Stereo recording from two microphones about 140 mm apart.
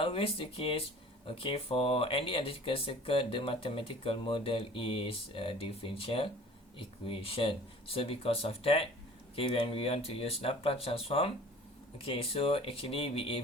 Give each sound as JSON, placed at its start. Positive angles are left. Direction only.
{"t": 0.0, "sound": "speech", "side_deg": 40}